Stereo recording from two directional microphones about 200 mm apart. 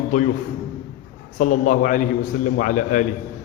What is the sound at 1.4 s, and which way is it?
A man's voice, 40° left (ahead or behind).